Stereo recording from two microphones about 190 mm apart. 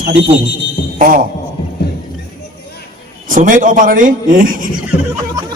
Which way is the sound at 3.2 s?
45° right (ahead or behind).